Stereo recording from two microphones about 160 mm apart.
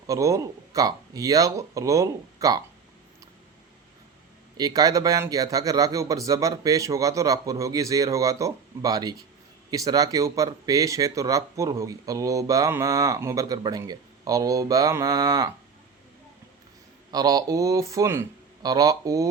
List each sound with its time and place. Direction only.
0.1 s speech: 20° right (ahead or behind)
4.5 s speech: 25° right (ahead or behind)
17.1 s speech: 25° right (ahead or behind)